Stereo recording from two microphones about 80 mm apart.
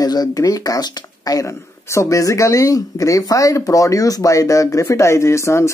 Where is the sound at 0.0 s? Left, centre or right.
Left.